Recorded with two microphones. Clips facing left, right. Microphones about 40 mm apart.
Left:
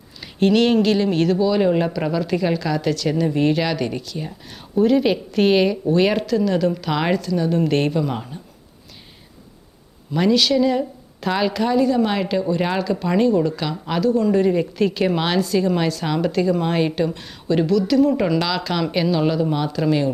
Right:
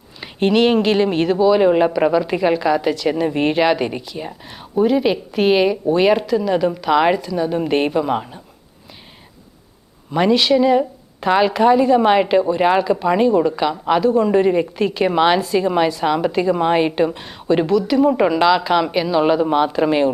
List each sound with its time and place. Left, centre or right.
0.2 s speech: right
10.1 s speech: right
19.2 s speech: right